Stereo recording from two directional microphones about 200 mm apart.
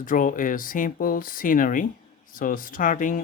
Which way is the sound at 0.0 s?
40° left (ahead or behind).